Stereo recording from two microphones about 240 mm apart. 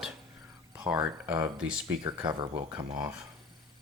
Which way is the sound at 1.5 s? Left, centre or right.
Centre.